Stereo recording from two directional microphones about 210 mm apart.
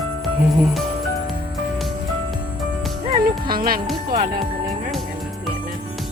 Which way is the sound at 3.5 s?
45° right (ahead or behind).